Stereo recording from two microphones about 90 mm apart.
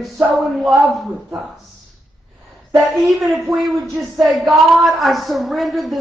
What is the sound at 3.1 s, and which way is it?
A woman's voice, 5° right (ahead or behind).